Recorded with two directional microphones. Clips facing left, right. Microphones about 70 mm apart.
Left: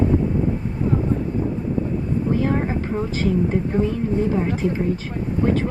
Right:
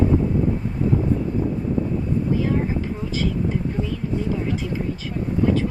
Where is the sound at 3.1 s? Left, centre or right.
Left.